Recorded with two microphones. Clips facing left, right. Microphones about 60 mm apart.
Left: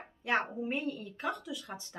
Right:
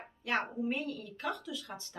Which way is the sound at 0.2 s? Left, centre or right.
Left.